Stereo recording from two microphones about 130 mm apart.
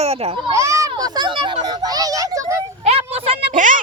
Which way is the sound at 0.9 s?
30° right (ahead or behind).